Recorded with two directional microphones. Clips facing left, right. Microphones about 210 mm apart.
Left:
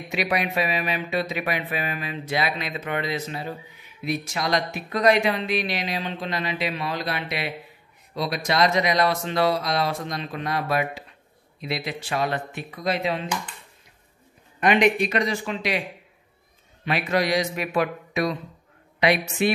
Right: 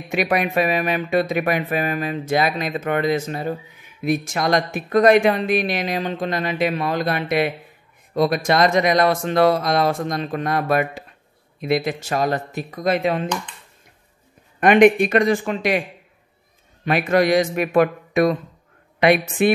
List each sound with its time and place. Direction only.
0.1 s speech: 50° right (ahead or behind)
14.6 s speech: 50° right (ahead or behind)
16.8 s speech: 50° right (ahead or behind)